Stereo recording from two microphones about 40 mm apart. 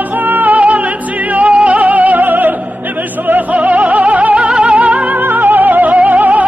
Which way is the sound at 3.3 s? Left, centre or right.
Right.